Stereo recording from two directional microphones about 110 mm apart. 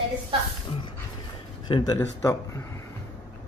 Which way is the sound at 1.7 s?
45° left (ahead or behind).